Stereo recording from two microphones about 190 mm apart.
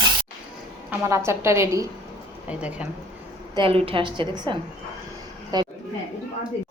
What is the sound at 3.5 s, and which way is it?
A woman's voice, 30° right (ahead or behind).